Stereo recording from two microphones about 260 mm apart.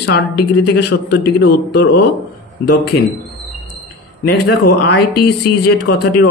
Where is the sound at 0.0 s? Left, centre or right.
Left.